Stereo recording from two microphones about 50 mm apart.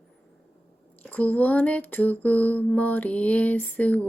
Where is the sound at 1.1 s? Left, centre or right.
Left.